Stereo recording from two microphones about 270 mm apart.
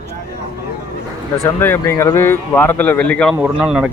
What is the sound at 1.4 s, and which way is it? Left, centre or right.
Speech, centre.